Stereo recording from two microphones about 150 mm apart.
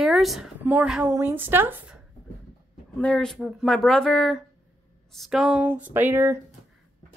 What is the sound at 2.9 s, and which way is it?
A woman's voice, 5° left (ahead or behind).